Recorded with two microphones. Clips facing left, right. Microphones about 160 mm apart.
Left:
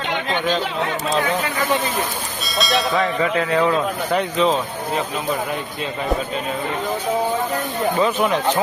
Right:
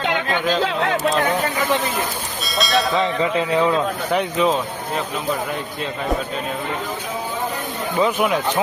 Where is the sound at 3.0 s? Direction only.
20° right (ahead or behind).